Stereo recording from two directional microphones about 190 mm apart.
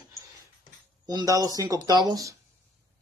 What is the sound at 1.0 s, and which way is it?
Speech, 20° right (ahead or behind).